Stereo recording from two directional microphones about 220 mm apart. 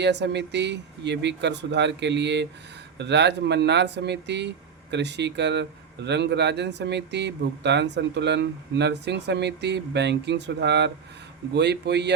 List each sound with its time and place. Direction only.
0.0 s speech: 50° right (ahead or behind)